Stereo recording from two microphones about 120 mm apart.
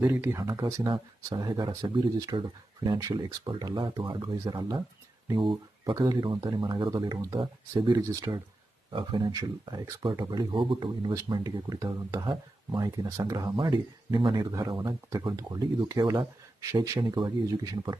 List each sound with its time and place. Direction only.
0.0 s speech: 20° right (ahead or behind)
0.4 s speech: 35° right (ahead or behind)
5.8 s speech: 30° right (ahead or behind)
8.9 s speech: 45° right (ahead or behind)